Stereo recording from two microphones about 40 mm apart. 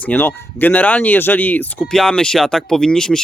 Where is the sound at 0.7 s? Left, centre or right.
Left.